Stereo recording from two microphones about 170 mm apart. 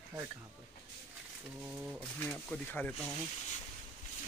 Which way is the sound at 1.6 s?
10° right (ahead or behind).